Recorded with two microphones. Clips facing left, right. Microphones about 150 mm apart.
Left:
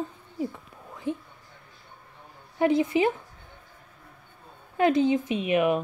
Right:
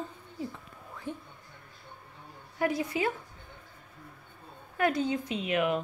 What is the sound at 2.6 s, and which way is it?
Speech, 25° left (ahead or behind).